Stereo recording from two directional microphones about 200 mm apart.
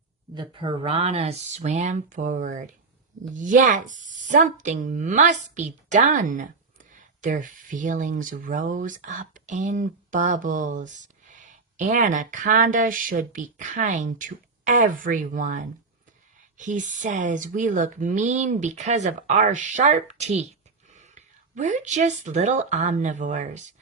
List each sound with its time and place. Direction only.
0.3 s a woman's voice: 25° right (ahead or behind)